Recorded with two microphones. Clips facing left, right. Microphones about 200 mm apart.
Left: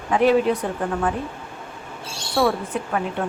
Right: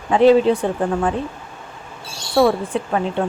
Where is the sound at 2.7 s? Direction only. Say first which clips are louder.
Right 4 dB; 30° right (ahead or behind).